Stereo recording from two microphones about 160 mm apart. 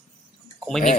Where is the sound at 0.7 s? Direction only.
5° left (ahead or behind).